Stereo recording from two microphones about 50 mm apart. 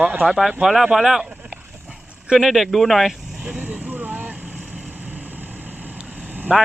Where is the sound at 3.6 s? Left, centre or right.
Right.